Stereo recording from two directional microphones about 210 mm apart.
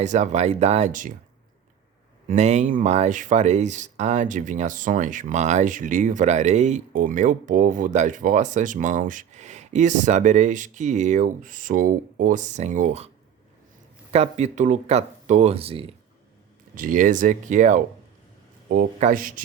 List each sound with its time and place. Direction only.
0.0 s speech: 35° right (ahead or behind)
2.3 s speech: 35° right (ahead or behind)
14.1 s speech: 30° right (ahead or behind)
16.7 s speech: 40° right (ahead or behind)